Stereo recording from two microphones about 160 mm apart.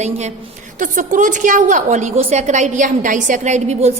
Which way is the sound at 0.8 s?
55° right (ahead or behind).